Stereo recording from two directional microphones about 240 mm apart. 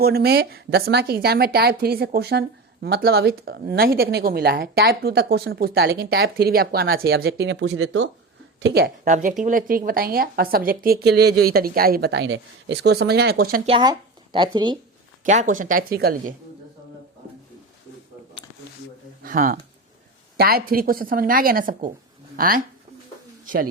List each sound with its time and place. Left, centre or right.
0.0 s a woman's voice: right
13.7 s speech: centre
15.2 s a woman's voice: right
19.2 s a woman's voice: right